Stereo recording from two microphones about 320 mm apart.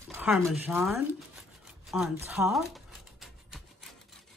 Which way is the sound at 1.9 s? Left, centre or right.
Centre.